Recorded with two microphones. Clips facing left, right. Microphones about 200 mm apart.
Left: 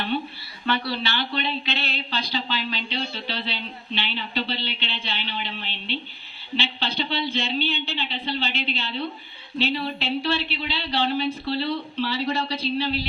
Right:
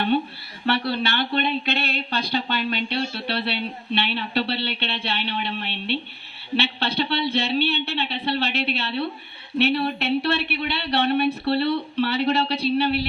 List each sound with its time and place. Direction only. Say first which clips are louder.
0.6 s speech: right 3 dB; 55° right (ahead or behind)